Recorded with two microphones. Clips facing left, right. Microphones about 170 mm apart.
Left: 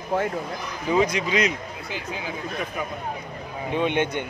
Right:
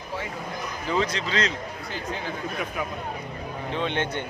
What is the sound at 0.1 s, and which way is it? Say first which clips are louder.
Speech: left 10 dB; 55° left (ahead or behind).